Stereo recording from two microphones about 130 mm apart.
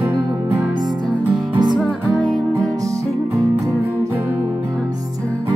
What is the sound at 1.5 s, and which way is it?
Music, 35° right (ahead or behind).